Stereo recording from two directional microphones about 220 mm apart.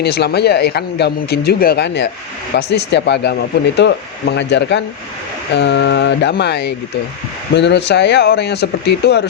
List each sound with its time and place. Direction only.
0.0 s speech: 45° left (ahead or behind)